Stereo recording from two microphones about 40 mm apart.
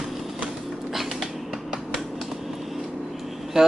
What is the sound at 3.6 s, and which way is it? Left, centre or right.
Vehicle, centre.